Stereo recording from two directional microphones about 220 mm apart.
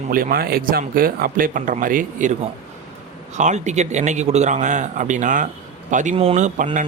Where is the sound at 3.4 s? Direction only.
35° right (ahead or behind).